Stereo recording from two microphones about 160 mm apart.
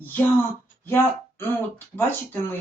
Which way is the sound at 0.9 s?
15° left (ahead or behind).